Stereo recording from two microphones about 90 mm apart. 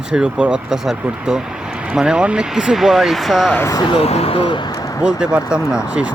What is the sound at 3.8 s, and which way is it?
Speech, 80° left.